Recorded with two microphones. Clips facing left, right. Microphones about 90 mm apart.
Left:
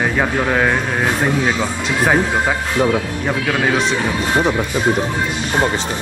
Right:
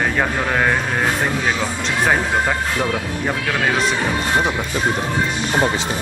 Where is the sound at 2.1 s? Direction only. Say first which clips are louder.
Left 2 dB; 10° left (ahead or behind).